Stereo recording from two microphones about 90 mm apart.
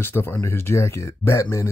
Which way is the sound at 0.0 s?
25° left (ahead or behind).